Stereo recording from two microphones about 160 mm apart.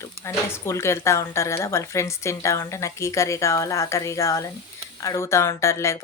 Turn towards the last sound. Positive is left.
turn(degrees=15)  # may be behind; listen again after turning